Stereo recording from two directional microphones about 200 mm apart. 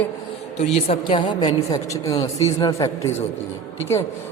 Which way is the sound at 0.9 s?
25° left (ahead or behind).